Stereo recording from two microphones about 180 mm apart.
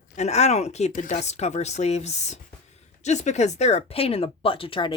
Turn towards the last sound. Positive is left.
turn(degrees=30)  # may be behind; listen again after turning